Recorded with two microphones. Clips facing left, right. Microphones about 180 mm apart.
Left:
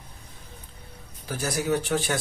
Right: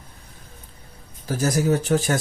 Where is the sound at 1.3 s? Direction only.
40° right (ahead or behind).